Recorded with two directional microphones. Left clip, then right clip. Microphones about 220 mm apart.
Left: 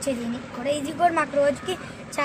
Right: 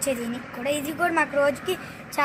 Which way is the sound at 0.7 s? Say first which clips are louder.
Left 3 dB; 25° right (ahead or behind).